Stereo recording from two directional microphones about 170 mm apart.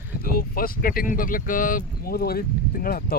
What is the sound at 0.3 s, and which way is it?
Speech, 60° left (ahead or behind).